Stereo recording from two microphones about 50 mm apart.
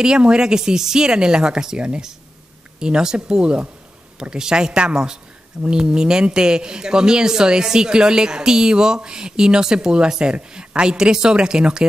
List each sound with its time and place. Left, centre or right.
0.0 s a woman's voice: centre